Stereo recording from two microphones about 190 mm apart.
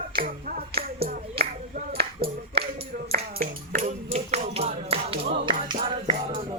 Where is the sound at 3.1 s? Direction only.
45° right (ahead or behind); by 6.4 s 25° right (ahead or behind).